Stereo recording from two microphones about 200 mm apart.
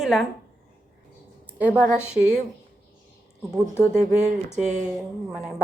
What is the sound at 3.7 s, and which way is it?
Speech, 10° left (ahead or behind).